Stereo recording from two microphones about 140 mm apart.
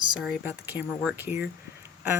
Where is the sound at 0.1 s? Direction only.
5° right (ahead or behind).